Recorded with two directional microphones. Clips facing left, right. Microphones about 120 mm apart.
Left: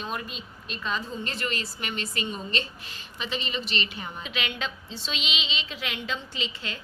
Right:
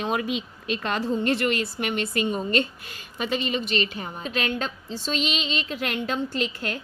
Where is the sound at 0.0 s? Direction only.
90° right.